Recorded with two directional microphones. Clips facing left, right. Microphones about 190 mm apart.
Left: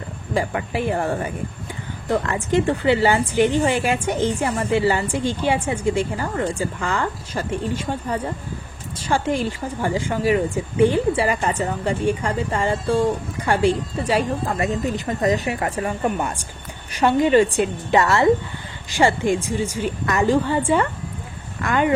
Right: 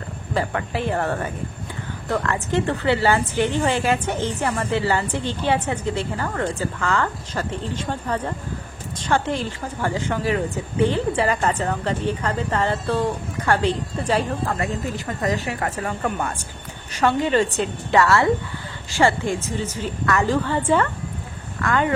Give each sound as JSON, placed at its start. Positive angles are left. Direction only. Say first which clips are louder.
{"t": 0.3, "sound": "speech", "louder": "left 1 dB", "side_deg": 15}